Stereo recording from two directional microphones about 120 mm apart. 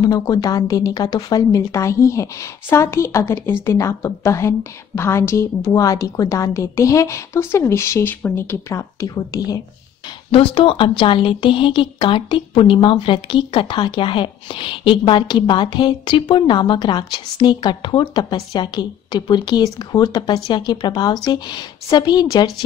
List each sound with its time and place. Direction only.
0.0 s a woman's voice: 30° left (ahead or behind)
10.3 s a woman's voice: 50° left (ahead or behind)